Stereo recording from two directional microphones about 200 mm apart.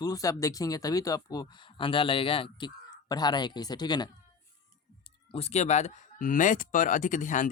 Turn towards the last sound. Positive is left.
turn(degrees=40)  # may be behind; listen again after turning